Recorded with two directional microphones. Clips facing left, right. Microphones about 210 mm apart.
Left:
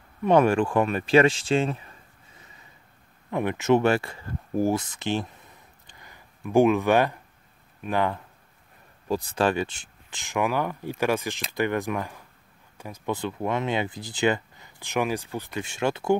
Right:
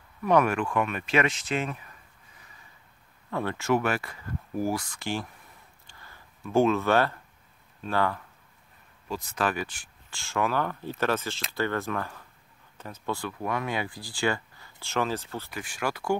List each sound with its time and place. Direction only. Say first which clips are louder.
0.2 s speech: left 4 dB; 25° left (ahead or behind)
5.9 s a sound: left 1 dB; 15° left (ahead or behind)
7.8 s speech: left 2 dB; 20° left (ahead or behind)
9.0 s speech: left 6 dB; 35° left (ahead or behind)